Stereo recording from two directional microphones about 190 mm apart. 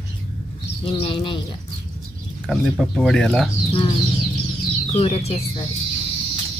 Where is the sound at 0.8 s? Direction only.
30° left (ahead or behind).